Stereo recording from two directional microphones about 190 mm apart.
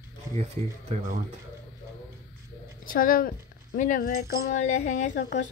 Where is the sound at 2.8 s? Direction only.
45° left (ahead or behind).